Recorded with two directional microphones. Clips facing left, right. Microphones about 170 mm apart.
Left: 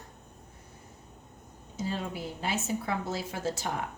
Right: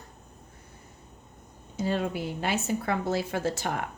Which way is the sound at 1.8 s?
65° right (ahead or behind).